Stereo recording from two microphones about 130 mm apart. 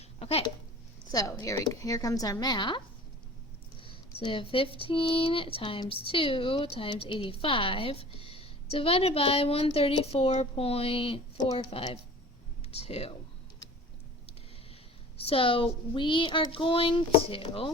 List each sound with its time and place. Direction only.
0.2 s a sound: 50° left (ahead or behind)
1.1 s speech: 25° left (ahead or behind)
3.8 s speech: 40° left (ahead or behind)
12.7 s speech: 55° left (ahead or behind)
15.2 s speech: 45° left (ahead or behind)